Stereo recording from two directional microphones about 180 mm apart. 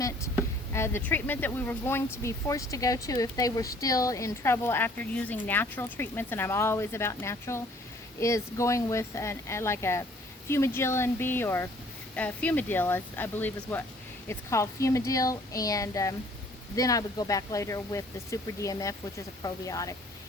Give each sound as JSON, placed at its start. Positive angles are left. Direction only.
{"t": 0.7, "sound": "speech", "side_deg": 15}